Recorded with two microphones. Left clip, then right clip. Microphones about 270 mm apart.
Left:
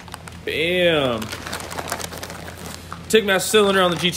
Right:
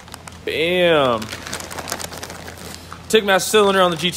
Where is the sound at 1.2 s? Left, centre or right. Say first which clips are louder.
Even; centre.